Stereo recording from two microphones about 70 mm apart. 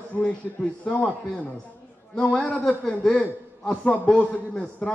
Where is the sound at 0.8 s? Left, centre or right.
Centre.